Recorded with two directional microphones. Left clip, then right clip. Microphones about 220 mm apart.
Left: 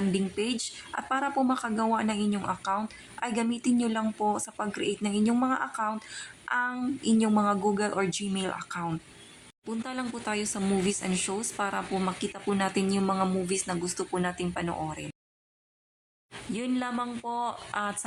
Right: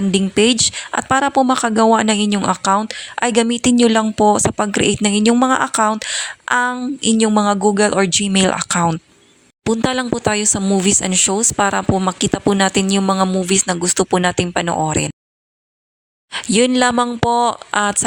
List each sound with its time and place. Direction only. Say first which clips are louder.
0.1 s speech: right 16 dB; 40° right (ahead or behind)
16.3 s speech: right 18 dB; 45° right (ahead or behind)